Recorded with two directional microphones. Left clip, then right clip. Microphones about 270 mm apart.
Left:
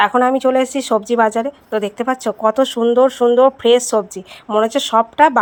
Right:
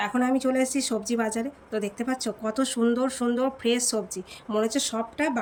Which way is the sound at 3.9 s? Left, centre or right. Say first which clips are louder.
Left 13 dB; left.